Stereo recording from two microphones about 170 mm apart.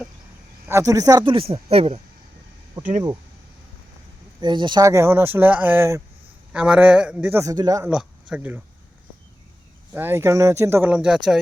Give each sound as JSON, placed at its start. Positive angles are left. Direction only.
{"t": 0.7, "sound": "speech", "side_deg": -20}
{"t": 4.4, "sound": "speech", "side_deg": -25}
{"t": 7.9, "sound": "speech", "side_deg": -5}
{"t": 9.9, "sound": "speech", "side_deg": -10}